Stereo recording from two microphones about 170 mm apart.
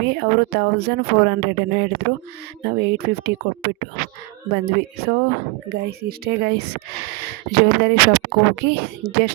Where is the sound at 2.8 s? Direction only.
70° right (ahead or behind).